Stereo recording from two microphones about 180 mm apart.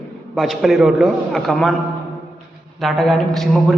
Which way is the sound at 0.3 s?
Centre (ahead or behind).